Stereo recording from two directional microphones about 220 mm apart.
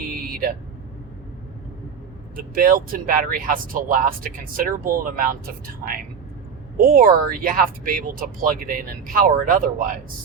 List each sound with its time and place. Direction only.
2.3 s speech: 40° right (ahead or behind)